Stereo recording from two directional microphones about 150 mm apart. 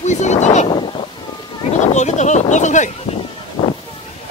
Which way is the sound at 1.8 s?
50° left (ahead or behind).